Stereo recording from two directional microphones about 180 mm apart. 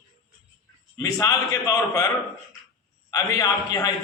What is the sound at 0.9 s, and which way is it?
A man's voice, 20° left (ahead or behind).